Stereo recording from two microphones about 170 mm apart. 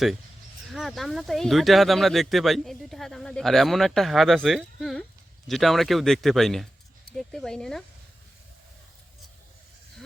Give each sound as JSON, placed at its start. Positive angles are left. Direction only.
{"t": 0.7, "sound": "speech", "side_deg": 0}